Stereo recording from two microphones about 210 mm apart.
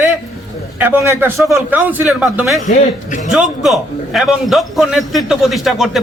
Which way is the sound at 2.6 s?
35° left (ahead or behind).